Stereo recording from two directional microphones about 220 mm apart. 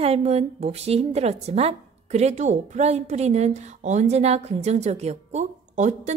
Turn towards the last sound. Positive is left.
turn(degrees=-30)  # may be behind; listen again after turning